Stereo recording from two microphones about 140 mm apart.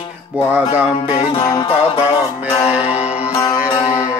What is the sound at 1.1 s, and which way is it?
Music, 30° left (ahead or behind).